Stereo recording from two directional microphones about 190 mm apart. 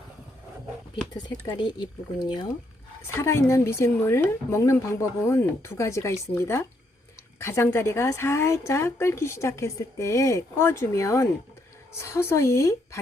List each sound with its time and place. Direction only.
1.1 s a woman's voice: 20° left (ahead or behind)